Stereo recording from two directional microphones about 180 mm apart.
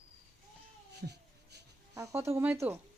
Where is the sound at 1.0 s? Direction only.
70° right (ahead or behind).